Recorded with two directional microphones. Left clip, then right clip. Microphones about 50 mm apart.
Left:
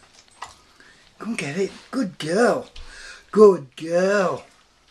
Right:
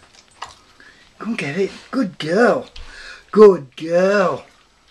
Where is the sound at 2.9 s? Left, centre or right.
Centre.